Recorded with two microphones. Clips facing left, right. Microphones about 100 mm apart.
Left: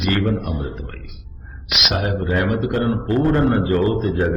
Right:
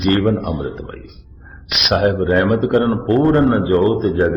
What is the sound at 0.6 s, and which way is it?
A man's voice, 30° right (ahead or behind).